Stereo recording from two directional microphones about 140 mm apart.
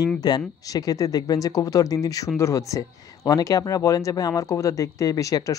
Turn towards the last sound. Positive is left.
turn(degrees=25)  # may be behind; listen again after turning